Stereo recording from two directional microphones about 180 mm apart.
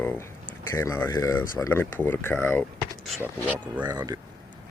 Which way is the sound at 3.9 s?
20° right (ahead or behind).